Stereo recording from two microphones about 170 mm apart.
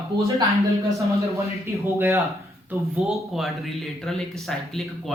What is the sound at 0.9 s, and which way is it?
Speech, 20° right (ahead or behind).